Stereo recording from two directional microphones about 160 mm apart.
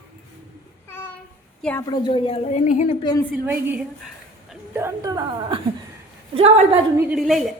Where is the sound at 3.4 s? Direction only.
10° right (ahead or behind).